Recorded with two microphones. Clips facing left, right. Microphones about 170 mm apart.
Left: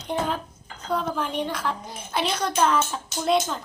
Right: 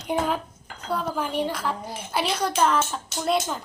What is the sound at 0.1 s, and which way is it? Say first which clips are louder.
A woman's voice: right 2 dB; 10° right (ahead or behind).